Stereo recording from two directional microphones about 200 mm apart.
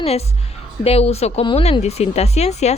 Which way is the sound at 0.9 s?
30° left (ahead or behind).